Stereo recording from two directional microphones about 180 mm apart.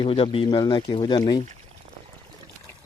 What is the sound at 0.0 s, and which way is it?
Speech, 30° left (ahead or behind).